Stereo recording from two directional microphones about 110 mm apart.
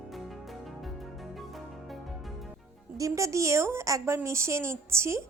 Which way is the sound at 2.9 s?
30° right (ahead or behind).